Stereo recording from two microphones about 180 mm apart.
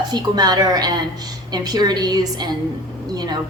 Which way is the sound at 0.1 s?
20° right (ahead or behind).